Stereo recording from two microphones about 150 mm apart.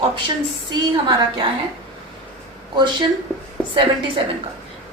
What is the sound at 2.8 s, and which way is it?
Speech, 30° right (ahead or behind).